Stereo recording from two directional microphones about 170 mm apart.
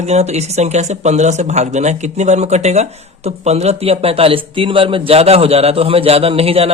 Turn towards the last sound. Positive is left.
turn(degrees=-35)  # may be behind; listen again after turning